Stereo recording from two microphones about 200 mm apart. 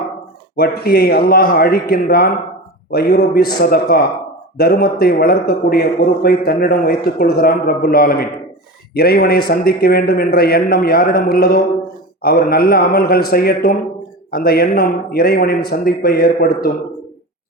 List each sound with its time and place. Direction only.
0.5 s a man's voice: 50° left (ahead or behind)